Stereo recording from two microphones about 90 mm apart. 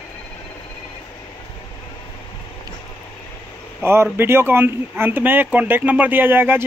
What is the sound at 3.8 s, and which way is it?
Speech, 25° right (ahead or behind).